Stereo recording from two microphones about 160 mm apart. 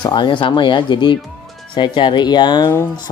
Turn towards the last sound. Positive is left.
turn(degrees=20)  # may be behind; listen again after turning